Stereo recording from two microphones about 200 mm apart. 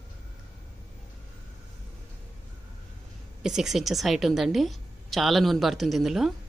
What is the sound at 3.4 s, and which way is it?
A woman's voice, centre (ahead or behind).